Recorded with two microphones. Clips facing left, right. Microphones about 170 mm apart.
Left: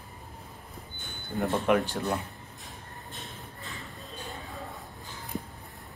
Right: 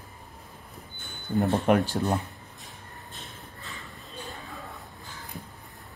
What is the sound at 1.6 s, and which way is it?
Speech, 40° right (ahead or behind).